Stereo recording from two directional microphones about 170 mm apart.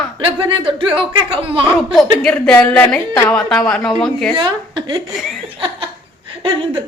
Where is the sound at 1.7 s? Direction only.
Centre (ahead or behind).